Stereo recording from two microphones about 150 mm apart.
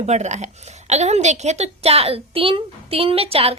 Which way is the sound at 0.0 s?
50° right (ahead or behind).